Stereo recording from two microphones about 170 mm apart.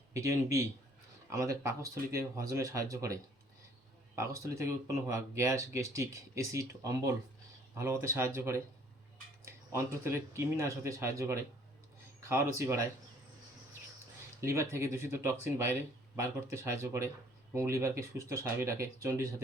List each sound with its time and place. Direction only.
0.1 s speech: 20° right (ahead or behind)
14.4 s speech: 15° right (ahead or behind)